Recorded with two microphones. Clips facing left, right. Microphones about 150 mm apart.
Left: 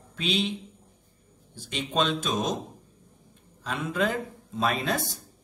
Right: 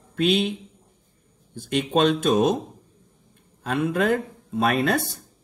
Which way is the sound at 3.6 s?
55° right (ahead or behind).